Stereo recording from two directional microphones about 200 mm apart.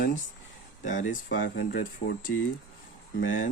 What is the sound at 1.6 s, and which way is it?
Speech, 45° left (ahead or behind).